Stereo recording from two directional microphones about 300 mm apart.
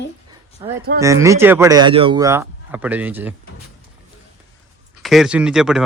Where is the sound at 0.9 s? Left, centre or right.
Centre.